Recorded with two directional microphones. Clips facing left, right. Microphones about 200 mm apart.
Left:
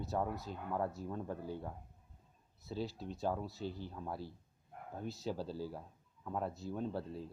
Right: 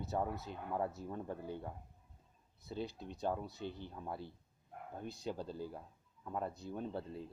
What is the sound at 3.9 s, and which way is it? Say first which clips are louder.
Speech: left 1 dB; centre (ahead or behind).